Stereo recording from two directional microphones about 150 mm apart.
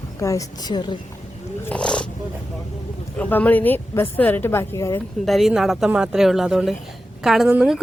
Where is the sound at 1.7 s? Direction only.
5° left (ahead or behind).